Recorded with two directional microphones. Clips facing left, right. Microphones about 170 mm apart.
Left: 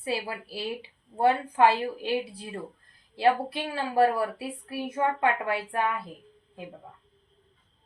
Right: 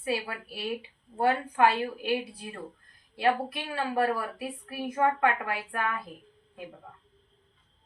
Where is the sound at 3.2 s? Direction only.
30° left (ahead or behind).